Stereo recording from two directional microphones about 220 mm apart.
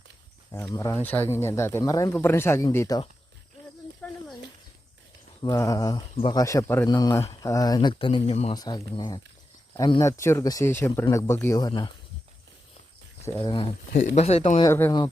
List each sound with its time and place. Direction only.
0.7 s speech: 15° left (ahead or behind)
4.0 s a sound: 5° left (ahead or behind)
5.4 s speech: 15° left (ahead or behind)
13.4 s speech: 20° left (ahead or behind)
14.7 s speech: 10° left (ahead or behind)